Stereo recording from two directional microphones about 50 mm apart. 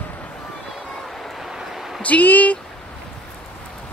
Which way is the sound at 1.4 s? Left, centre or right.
Centre.